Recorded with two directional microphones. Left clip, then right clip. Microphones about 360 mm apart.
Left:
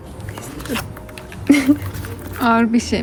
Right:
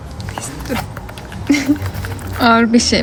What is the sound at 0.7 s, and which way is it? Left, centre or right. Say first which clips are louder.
Speech: right 3 dB; centre.